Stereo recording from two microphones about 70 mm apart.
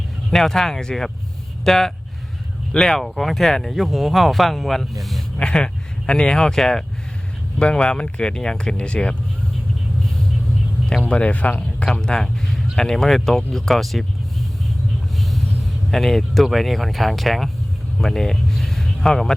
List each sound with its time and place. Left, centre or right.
0.3 s speech: centre
5.4 s speech: centre
11.0 s speech: centre
11.9 s speech: centre